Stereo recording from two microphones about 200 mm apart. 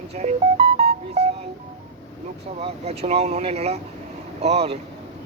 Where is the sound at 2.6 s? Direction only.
30° right (ahead or behind).